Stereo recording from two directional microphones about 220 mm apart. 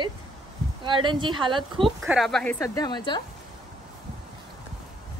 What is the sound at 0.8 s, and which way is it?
A woman's voice, 20° right (ahead or behind).